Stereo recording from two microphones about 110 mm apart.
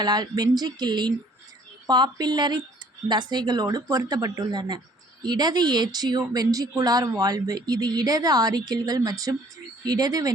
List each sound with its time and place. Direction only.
0.0 s speech: 40° right (ahead or behind)